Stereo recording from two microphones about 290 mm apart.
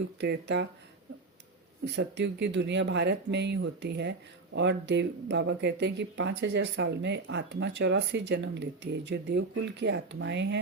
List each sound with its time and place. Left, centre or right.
0.2 s speech: right
1.8 s speech: right